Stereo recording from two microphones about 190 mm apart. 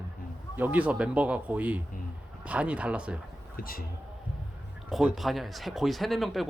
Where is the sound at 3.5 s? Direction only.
50° left (ahead or behind).